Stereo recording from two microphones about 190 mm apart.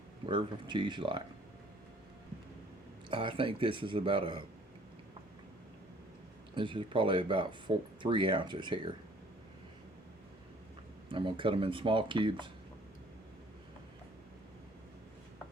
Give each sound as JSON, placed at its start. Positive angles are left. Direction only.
{"t": 0.3, "sound": "speech", "side_deg": -25}
{"t": 3.1, "sound": "speech", "side_deg": -25}
{"t": 6.6, "sound": "speech", "side_deg": -25}
{"t": 11.1, "sound": "speech", "side_deg": -25}